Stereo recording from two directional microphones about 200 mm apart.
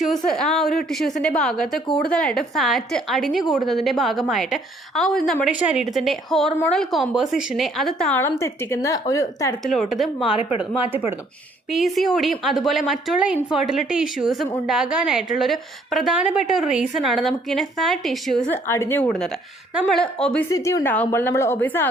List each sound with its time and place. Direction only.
0.3 s a woman's voice: centre (ahead or behind)
9.6 s a woman's voice: centre (ahead or behind)
11.7 s a woman's voice: centre (ahead or behind)
18.7 s a woman's voice: 10° left (ahead or behind)
20.5 s a woman's voice: 15° left (ahead or behind)